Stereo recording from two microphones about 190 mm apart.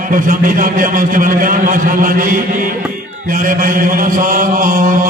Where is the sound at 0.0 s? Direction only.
45° right (ahead or behind).